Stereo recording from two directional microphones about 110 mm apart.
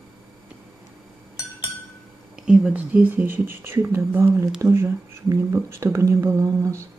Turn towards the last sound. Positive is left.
turn(degrees=-25)  # may be behind; listen again after turning